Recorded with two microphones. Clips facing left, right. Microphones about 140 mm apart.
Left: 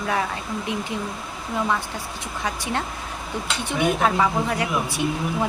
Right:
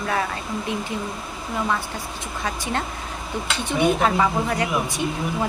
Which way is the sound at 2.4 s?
15° left (ahead or behind).